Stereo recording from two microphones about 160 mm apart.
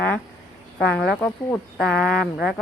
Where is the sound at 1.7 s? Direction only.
Centre (ahead or behind).